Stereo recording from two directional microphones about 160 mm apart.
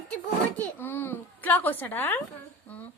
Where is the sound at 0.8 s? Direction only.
15° left (ahead or behind).